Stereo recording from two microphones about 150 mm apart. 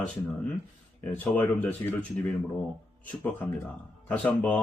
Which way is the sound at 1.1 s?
15° left (ahead or behind).